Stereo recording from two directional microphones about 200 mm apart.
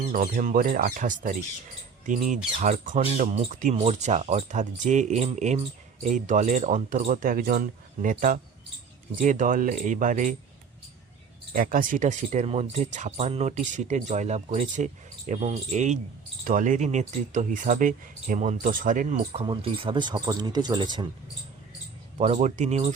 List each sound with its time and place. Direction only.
0.1 s speech: 40° right (ahead or behind)
11.5 s speech: 45° right (ahead or behind); by 21.1 s 20° right (ahead or behind)
22.2 s speech: 35° right (ahead or behind)